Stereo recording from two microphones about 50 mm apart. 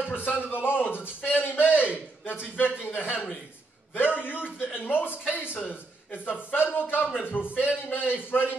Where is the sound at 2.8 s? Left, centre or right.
Left.